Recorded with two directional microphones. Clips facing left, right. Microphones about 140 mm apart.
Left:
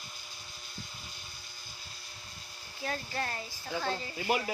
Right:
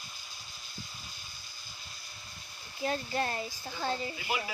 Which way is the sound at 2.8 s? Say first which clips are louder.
Right 4 dB; 20° right (ahead or behind).